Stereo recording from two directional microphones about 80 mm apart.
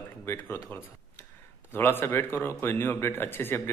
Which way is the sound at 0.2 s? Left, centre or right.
Left.